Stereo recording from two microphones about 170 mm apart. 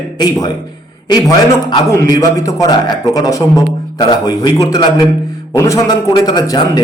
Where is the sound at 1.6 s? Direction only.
20° left (ahead or behind).